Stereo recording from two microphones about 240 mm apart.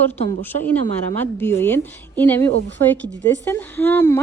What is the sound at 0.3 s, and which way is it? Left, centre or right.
A woman's voice, centre.